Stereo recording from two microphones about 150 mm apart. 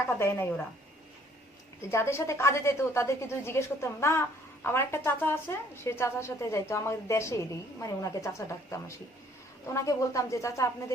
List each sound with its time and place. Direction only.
0.2 s speech: 15° left (ahead or behind)
1.9 s a woman's voice: 15° left (ahead or behind)